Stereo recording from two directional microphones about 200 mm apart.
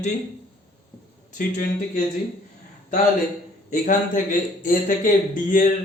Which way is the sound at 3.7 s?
40° left (ahead or behind).